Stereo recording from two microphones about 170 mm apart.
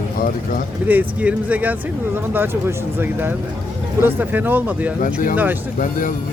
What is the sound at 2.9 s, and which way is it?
Speech, 10° right (ahead or behind).